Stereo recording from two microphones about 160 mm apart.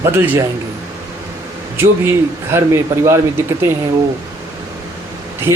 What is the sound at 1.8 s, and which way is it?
Speech, 15° right (ahead or behind).